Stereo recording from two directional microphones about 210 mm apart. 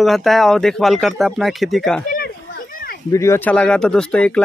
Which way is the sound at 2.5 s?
45° left (ahead or behind).